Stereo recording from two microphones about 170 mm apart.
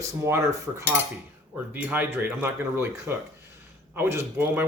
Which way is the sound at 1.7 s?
10° right (ahead or behind).